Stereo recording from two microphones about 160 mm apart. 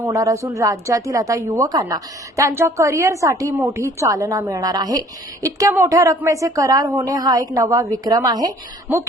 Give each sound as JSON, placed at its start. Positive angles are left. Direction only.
{"t": 0.1, "sound": "speech", "side_deg": -20}